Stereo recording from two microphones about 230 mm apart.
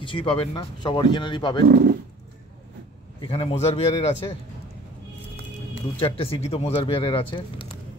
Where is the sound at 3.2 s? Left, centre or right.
Left.